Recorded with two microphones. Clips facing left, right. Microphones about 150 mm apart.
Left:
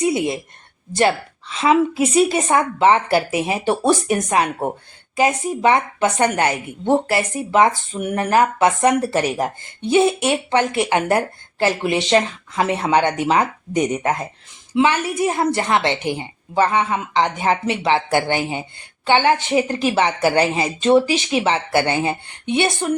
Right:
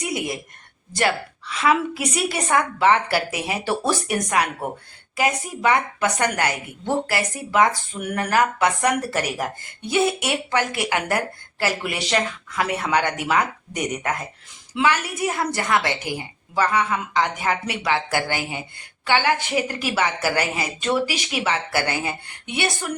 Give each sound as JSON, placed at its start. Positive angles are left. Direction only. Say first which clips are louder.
{"t": 0.0, "sound": "a woman's voice", "louder": "left 8 dB", "side_deg": 25}